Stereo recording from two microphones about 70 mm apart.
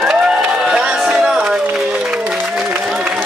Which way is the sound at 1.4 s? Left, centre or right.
Centre.